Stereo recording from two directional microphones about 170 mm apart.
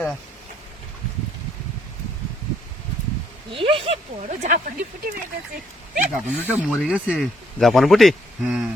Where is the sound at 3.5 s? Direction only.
30° right (ahead or behind).